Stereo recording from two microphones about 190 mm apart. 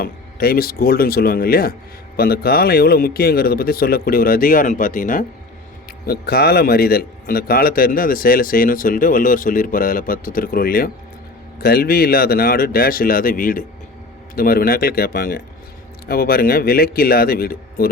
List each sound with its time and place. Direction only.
0.0 s a man's voice: 50° left (ahead or behind)
6.1 s a man's voice: 55° left (ahead or behind)